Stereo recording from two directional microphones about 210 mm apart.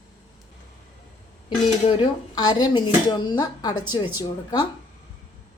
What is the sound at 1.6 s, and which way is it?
Speech, 30° left (ahead or behind).